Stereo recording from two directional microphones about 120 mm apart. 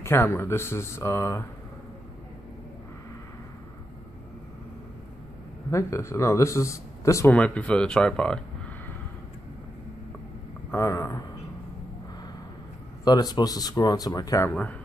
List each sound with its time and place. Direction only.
0.0 s speech: 20° left (ahead or behind)
5.7 s speech: 25° left (ahead or behind)
7.2 s speech: 10° left (ahead or behind)
10.7 s a sound: 25° left (ahead or behind)
13.0 s speech: 35° left (ahead or behind)
14.5 s speech: 10° left (ahead or behind)